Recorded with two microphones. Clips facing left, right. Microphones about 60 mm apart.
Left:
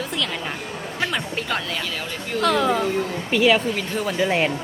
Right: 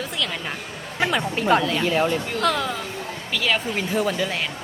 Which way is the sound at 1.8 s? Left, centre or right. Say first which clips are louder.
Right 9 dB; right.